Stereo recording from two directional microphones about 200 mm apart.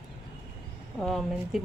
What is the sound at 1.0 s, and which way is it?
Speech, centre (ahead or behind).